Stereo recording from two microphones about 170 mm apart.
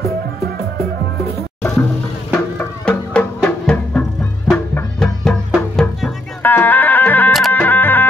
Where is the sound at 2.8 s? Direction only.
10° left (ahead or behind).